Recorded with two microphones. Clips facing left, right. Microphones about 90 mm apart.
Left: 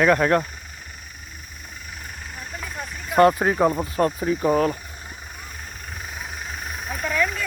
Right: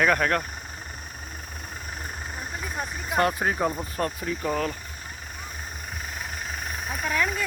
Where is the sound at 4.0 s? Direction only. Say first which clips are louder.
Left 7 dB; 30° left (ahead or behind).